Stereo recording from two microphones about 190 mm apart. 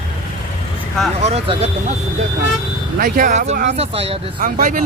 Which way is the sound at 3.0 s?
45° right (ahead or behind).